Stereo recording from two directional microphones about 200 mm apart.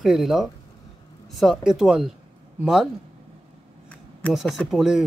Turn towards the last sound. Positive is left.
turn(degrees=0)  # may be behind; listen again after turning